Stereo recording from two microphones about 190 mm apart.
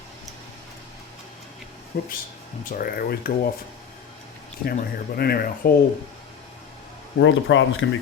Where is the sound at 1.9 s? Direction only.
55° left (ahead or behind).